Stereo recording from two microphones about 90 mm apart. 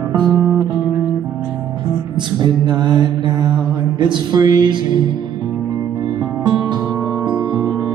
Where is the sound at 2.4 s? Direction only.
55° right (ahead or behind).